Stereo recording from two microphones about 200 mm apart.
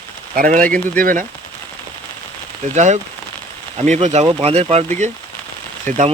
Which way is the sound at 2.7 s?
35° right (ahead or behind).